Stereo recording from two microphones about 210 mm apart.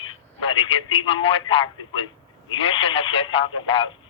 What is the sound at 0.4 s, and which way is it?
Speech, 25° left (ahead or behind).